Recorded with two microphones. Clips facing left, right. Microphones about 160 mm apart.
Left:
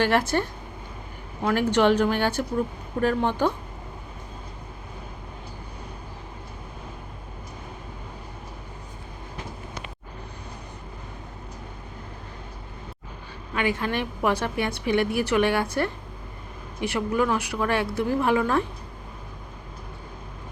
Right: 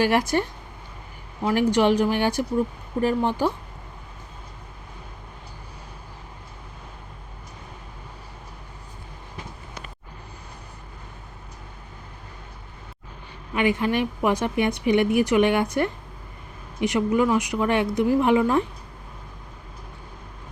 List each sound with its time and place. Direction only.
0.0 s a woman's voice: 10° right (ahead or behind)
13.5 s a woman's voice: 15° right (ahead or behind)